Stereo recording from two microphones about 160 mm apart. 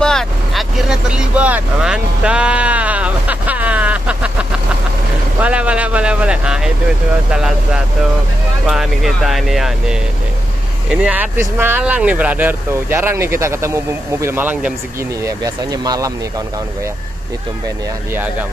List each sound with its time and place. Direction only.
0.0 s speech: 5° left (ahead or behind)
15.2 s speech: 20° right (ahead or behind)